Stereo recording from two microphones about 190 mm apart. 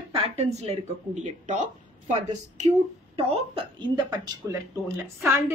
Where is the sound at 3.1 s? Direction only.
30° right (ahead or behind).